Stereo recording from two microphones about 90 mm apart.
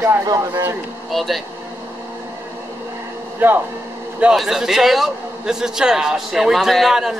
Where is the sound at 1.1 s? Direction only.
Centre (ahead or behind).